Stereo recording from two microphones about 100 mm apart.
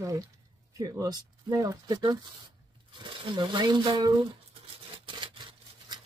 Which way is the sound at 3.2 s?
55° right (ahead or behind).